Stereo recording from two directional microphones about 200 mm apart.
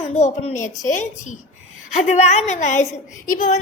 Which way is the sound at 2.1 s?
35° left (ahead or behind).